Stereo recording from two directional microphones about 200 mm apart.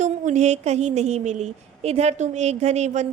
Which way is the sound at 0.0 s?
35° right (ahead or behind).